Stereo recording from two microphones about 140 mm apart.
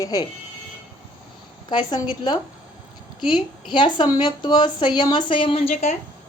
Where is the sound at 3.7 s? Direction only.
35° left (ahead or behind).